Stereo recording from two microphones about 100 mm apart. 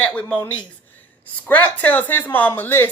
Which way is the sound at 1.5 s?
15° left (ahead or behind).